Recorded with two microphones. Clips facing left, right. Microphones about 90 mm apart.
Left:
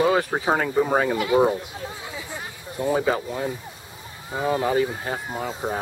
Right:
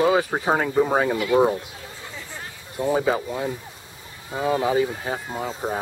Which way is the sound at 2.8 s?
Centre (ahead or behind).